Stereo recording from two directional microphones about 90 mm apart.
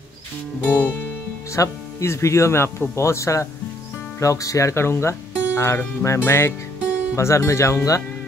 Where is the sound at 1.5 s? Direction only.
35° left (ahead or behind).